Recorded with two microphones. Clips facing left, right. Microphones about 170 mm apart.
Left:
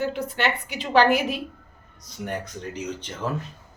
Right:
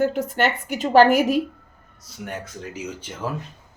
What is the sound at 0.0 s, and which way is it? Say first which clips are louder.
A woman's voice: right 5 dB; 45° right (ahead or behind).